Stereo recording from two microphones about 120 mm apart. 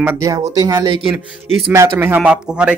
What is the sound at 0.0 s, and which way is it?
Speech, 15° right (ahead or behind).